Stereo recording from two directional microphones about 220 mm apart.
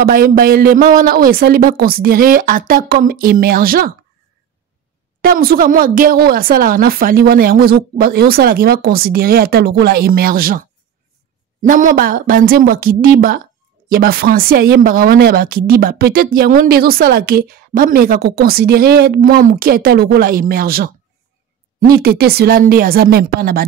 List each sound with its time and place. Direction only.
0.0 s speech: 40° right (ahead or behind)
5.2 s speech: 45° right (ahead or behind)
22.0 s speech: 45° right (ahead or behind)